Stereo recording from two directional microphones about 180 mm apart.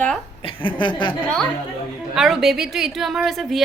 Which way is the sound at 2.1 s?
Centre (ahead or behind).